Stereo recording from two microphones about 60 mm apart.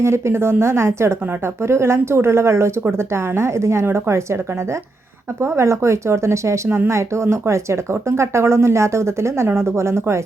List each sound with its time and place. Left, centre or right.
0.0 s speech: right
5.4 s speech: right
6.7 s speech: right
6.9 s speech: right